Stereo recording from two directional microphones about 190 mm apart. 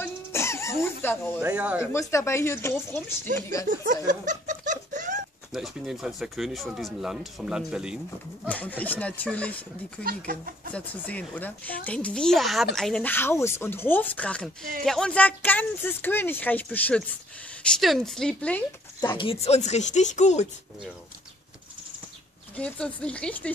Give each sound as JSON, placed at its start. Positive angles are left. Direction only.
{"t": 0.0, "sound": "music", "side_deg": 15}
{"t": 1.4, "sound": "speech", "side_deg": -10}
{"t": 1.9, "sound": "speech", "side_deg": 15}
{"t": 3.6, "sound": "snicker", "side_deg": -40}
{"t": 5.5, "sound": "speech", "side_deg": 0}
{"t": 8.5, "sound": "speech", "side_deg": 10}
{"t": 10.0, "sound": "speech", "side_deg": -50}
{"t": 10.7, "sound": "speech", "side_deg": 10}
{"t": 18.9, "sound": "speech", "side_deg": 20}
{"t": 22.6, "sound": "speech", "side_deg": 5}